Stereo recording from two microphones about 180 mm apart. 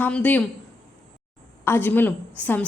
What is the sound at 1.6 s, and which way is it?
A woman's voice, 10° left (ahead or behind).